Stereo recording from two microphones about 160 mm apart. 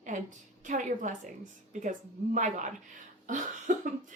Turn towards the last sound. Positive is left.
turn(degrees=-50)  # may be behind; listen again after turning